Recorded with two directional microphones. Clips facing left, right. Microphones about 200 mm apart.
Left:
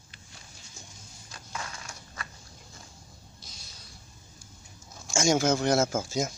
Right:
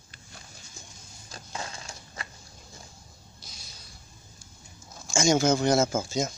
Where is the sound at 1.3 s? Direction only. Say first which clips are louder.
Right 2 dB; 30° right (ahead or behind).